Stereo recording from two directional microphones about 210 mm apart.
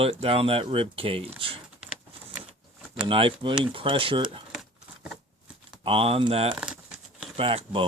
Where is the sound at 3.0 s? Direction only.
25° right (ahead or behind).